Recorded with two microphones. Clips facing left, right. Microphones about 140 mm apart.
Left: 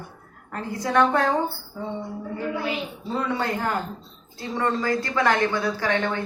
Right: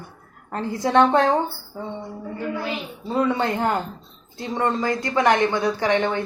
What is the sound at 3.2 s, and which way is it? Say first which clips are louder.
A woman's voice: right 3 dB; 20° right (ahead or behind).